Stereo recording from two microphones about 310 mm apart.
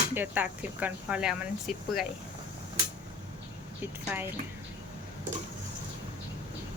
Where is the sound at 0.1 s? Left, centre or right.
Centre.